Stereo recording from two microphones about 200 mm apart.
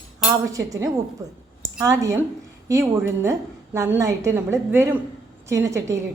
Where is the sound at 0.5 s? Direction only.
15° right (ahead or behind).